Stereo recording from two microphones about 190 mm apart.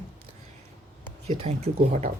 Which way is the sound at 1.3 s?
35° right (ahead or behind).